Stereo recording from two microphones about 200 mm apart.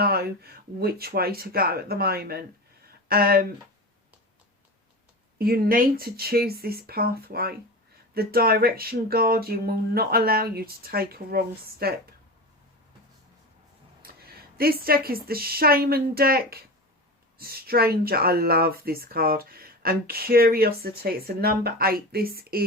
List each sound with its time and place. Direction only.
0.0 s speech: 50° right (ahead or behind)
5.4 s speech: 50° right (ahead or behind)
14.6 s speech: 50° right (ahead or behind)